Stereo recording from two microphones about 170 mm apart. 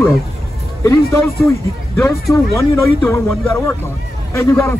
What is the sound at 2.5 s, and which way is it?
Speech, 15° left (ahead or behind).